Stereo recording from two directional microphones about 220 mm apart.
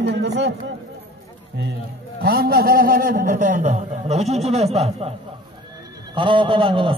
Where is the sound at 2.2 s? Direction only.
45° right (ahead or behind); by 5.1 s 25° right (ahead or behind).